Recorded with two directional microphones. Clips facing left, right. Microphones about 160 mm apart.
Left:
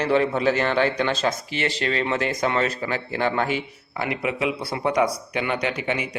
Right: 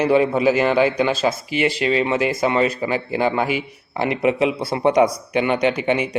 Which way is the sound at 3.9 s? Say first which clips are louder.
Right 7 dB; 25° right (ahead or behind).